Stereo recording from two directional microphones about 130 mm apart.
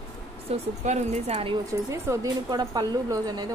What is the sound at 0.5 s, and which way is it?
A woman's voice, 60° right (ahead or behind).